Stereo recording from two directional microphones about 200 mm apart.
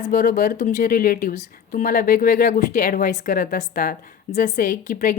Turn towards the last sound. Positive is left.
turn(degrees=40)  # may be behind; listen again after turning